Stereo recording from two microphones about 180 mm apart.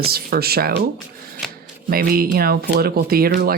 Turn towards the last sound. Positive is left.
turn(degrees=-55)  # may be behind; listen again after turning